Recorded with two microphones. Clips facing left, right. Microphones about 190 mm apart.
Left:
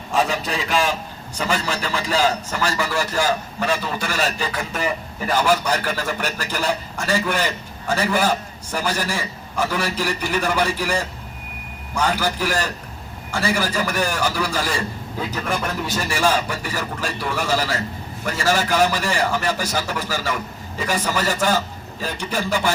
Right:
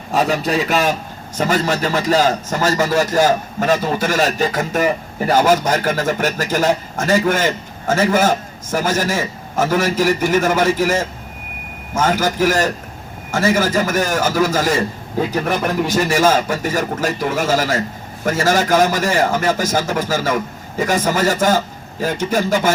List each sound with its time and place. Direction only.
0.1 s a man's voice: 40° right (ahead or behind)